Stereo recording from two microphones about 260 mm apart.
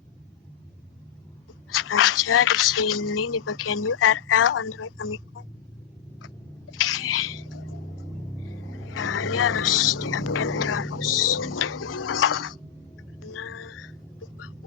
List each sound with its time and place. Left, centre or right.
1.7 s a woman's voice: left
7.0 s a sound: left
8.8 s speech: left
13.3 s music: left